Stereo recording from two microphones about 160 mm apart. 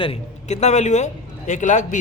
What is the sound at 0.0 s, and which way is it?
A man's voice, 40° left (ahead or behind).